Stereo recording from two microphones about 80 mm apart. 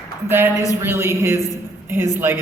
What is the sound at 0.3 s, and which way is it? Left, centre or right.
A woman's voice, right.